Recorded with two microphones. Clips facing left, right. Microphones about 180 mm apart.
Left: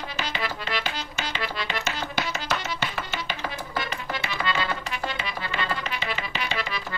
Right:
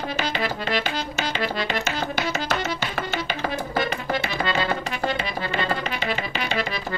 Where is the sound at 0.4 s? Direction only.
45° right (ahead or behind).